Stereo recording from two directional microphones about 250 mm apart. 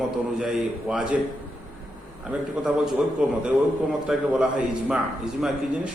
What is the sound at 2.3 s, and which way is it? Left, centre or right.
A man's voice, centre.